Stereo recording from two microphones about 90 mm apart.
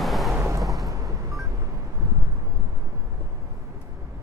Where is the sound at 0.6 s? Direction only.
Centre (ahead or behind).